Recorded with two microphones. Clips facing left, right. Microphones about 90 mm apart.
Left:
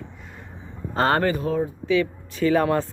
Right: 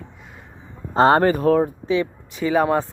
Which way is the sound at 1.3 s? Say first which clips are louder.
Right 7 dB; 60° right (ahead or behind).